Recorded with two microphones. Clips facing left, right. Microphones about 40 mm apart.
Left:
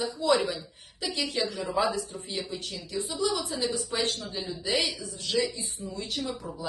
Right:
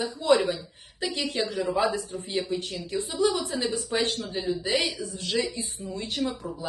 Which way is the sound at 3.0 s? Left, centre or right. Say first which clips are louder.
Right 4 dB; right.